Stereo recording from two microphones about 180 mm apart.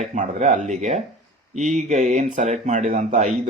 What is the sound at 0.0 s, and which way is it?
Speech, 40° right (ahead or behind).